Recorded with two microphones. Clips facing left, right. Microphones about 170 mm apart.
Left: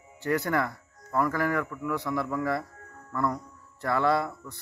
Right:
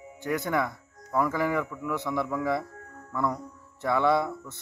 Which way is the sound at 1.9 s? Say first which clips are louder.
Right 1 dB; 20° right (ahead or behind).